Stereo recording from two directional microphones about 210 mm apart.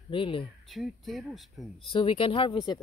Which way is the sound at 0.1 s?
25° left (ahead or behind).